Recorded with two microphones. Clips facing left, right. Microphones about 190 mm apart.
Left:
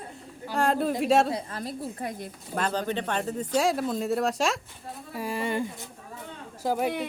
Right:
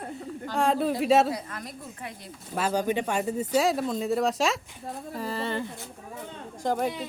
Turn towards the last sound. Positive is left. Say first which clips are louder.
# even
turn(degrees=5)  # may be behind; listen again after turning